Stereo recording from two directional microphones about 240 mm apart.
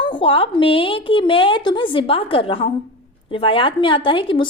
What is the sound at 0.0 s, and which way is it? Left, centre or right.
A woman's voice, left.